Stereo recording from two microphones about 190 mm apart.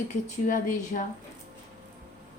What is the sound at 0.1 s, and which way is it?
Speech, 40° left (ahead or behind).